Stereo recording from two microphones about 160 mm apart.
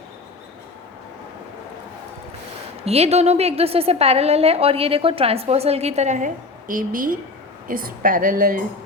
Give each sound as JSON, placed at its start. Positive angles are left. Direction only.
{"t": 2.8, "sound": "a woman's voice", "side_deg": -40}